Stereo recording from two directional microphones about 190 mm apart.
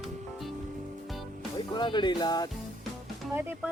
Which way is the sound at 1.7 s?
25° left (ahead or behind).